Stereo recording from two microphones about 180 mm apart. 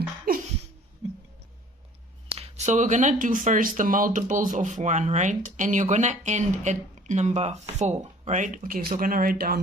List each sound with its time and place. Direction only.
0.3 s laughter: 55° right (ahead or behind)
2.6 s speech: 40° right (ahead or behind)